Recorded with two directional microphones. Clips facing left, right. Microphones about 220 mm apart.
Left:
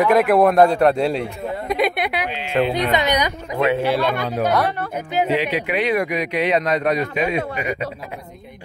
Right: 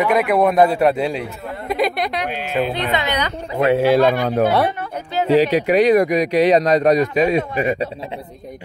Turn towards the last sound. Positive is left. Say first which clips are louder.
# right 4 dB
turn(degrees=-35)  # may be behind; listen again after turning